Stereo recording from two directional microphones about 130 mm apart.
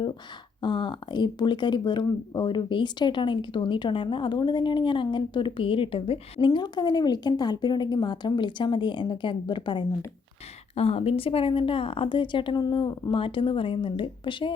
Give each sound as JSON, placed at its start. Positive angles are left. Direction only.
{"t": 0.6, "sound": "speech", "side_deg": 35}
{"t": 10.8, "sound": "speech", "side_deg": 50}